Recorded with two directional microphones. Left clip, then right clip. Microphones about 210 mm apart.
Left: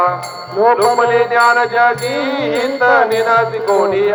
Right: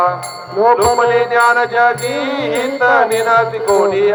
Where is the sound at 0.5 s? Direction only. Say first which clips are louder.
Even; 45° right (ahead or behind).